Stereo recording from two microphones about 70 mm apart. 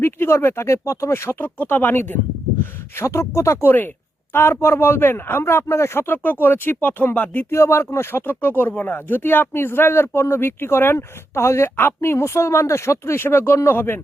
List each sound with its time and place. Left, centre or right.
0.0 s speech: left
3.7 s speech: left
7.5 s speech: left